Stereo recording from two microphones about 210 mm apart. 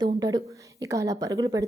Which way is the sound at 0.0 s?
20° right (ahead or behind).